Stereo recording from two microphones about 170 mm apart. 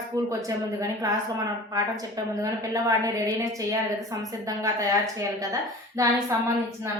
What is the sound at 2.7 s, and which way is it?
Speech, 20° right (ahead or behind).